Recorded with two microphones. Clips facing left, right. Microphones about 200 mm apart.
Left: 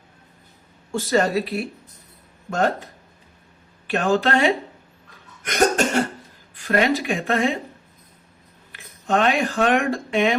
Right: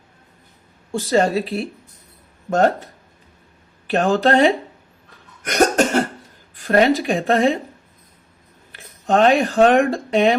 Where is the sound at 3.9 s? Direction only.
45° right (ahead or behind).